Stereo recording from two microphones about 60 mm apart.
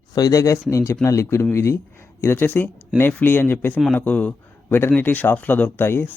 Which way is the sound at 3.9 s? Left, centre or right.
Left.